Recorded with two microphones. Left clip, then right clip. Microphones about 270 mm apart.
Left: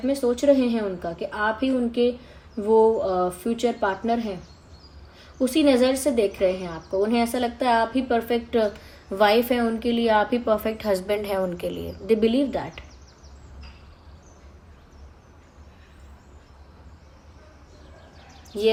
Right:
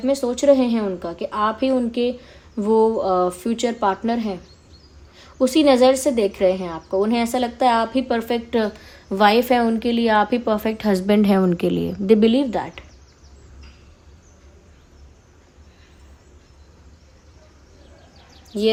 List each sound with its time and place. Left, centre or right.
0.4 s a woman's voice: right